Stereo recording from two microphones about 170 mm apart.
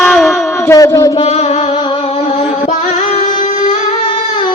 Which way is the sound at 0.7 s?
20° left (ahead or behind).